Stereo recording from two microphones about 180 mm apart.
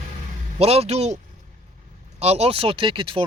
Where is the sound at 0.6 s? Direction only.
35° right (ahead or behind).